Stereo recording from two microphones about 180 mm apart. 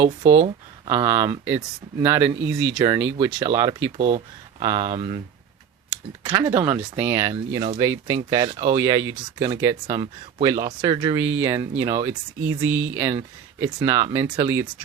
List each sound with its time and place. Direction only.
0.9 s speech: 20° right (ahead or behind)
2.4 s speech: 90° right
2.7 s speech: 20° right (ahead or behind)
3.9 s speech: 35° right (ahead or behind)
4.6 s speech: 20° right (ahead or behind)
6.2 s speech: 20° right (ahead or behind)
12.6 s speech: 90° right
13.0 s speech: 15° right (ahead or behind)